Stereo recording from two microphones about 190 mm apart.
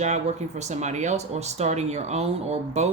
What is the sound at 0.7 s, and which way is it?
Speech, 40° right (ahead or behind).